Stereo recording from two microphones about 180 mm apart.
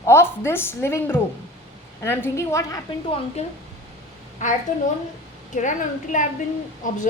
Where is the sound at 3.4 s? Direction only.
35° left (ahead or behind).